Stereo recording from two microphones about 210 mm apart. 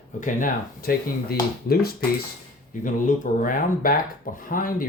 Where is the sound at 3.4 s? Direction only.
40° left (ahead or behind).